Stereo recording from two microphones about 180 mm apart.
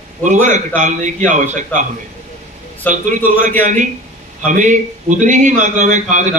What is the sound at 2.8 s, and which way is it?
Speech, 10° left (ahead or behind).